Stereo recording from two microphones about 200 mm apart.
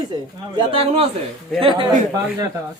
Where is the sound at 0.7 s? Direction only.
30° right (ahead or behind).